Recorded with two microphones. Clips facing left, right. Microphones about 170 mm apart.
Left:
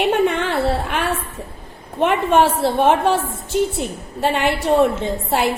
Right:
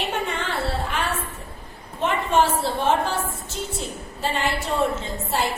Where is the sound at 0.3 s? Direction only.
60° left (ahead or behind).